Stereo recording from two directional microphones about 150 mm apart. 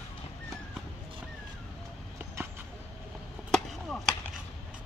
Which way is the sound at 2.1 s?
15° right (ahead or behind).